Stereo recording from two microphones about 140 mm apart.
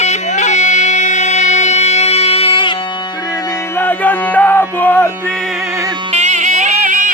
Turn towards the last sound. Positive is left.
turn(degrees=-70)  # may be behind; listen again after turning